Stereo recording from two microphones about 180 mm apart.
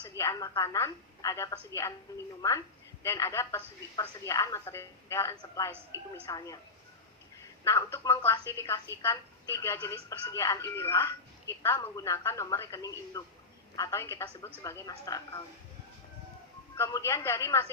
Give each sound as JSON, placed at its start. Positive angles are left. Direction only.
{"t": 0.0, "sound": "a woman's voice", "side_deg": 15}
{"t": 7.6, "sound": "a woman's voice", "side_deg": 15}
{"t": 16.7, "sound": "speech", "side_deg": 15}